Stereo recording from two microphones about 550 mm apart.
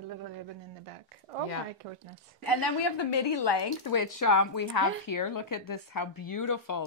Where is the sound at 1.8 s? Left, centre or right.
Right.